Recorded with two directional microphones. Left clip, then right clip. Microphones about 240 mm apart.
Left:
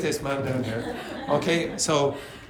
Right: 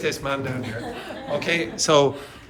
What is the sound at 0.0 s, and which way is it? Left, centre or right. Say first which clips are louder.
A man's voice: right 2 dB; centre.